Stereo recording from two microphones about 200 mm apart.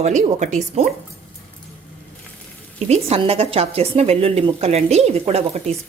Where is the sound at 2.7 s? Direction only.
35° right (ahead or behind).